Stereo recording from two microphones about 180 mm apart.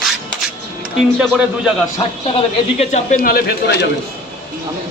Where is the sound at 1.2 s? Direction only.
5° right (ahead or behind).